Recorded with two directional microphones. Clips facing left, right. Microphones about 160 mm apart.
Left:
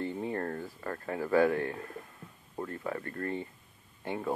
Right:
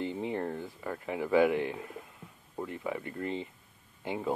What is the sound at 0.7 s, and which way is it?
Speech, 10° right (ahead or behind).